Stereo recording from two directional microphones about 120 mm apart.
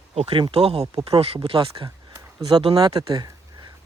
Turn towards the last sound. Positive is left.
turn(degrees=-30)  # may be behind; listen again after turning